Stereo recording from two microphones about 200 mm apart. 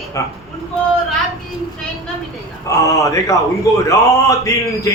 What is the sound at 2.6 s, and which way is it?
A man's voice, 15° left (ahead or behind).